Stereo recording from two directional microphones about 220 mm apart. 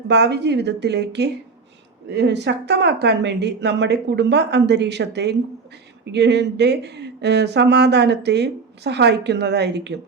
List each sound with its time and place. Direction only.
0.1 s speech: 50° right (ahead or behind)